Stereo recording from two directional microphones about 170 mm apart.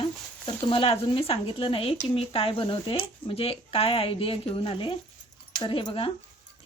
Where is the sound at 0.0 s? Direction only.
30° left (ahead or behind).